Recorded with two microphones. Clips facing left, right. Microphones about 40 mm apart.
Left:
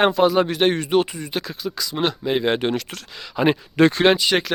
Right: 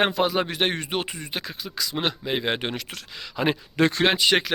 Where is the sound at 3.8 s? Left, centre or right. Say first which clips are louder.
Left 6 dB; left.